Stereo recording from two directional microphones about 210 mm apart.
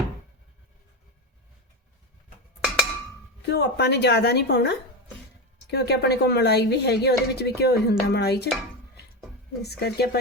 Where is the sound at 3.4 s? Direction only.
50° left (ahead or behind).